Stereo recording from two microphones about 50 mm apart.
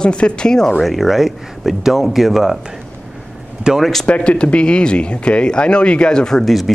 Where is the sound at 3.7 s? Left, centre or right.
Centre.